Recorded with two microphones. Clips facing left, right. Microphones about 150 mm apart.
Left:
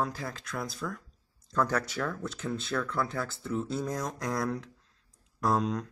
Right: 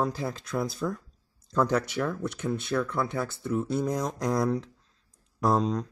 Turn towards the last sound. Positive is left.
turn(degrees=-20)  # may be behind; listen again after turning